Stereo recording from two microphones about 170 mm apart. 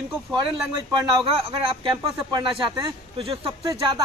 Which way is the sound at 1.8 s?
30° right (ahead or behind).